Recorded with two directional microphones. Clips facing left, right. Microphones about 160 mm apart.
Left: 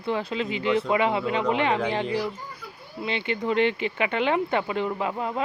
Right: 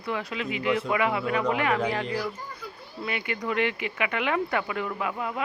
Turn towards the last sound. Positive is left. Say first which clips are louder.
# left 3 dB
turn(degrees=30)  # may be behind; listen again after turning